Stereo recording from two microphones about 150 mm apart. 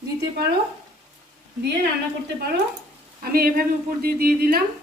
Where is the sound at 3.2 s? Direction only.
80° right.